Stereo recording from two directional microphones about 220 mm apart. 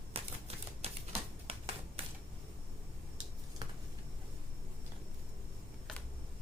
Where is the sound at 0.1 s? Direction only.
25° right (ahead or behind).